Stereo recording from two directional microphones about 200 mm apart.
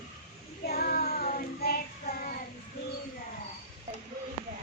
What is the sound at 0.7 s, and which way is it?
Child singing, 50° left (ahead or behind).